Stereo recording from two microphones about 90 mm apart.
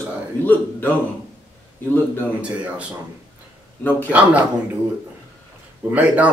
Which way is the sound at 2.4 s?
15° right (ahead or behind).